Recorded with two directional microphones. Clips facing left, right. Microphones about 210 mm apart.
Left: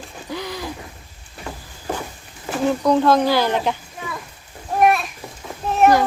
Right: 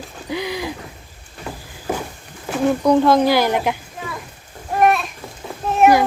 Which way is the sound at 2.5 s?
Centre (ahead or behind).